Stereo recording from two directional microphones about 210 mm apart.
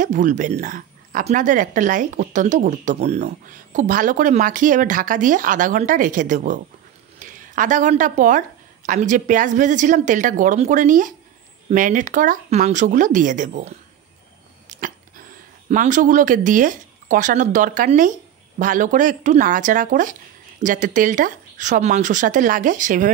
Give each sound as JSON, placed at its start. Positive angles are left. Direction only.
{"t": 0.0, "sound": "speech", "side_deg": -40}
{"t": 14.7, "sound": "a sound", "side_deg": -40}
{"t": 15.7, "sound": "speech", "side_deg": -40}